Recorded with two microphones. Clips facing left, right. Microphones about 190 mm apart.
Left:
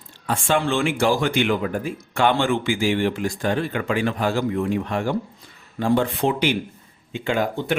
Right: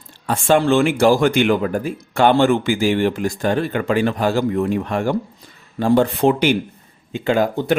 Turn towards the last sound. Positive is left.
turn(degrees=-40)  # may be behind; listen again after turning